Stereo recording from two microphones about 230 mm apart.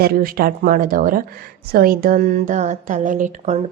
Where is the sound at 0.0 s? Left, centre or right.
Right.